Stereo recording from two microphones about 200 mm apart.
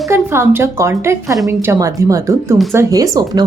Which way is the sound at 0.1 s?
10° right (ahead or behind).